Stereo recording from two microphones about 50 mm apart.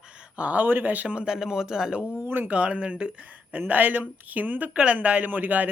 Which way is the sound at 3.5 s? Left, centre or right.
Right.